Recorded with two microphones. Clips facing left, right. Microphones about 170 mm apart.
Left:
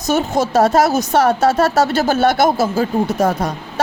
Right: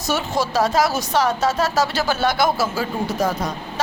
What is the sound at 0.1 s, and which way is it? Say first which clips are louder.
A woman's voice: left 6 dB; 45° left (ahead or behind).